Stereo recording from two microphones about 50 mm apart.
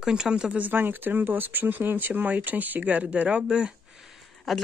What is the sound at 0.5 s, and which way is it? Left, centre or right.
Speech, right.